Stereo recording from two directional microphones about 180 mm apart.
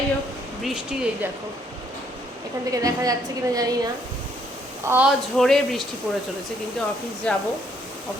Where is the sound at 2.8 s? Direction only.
20° right (ahead or behind).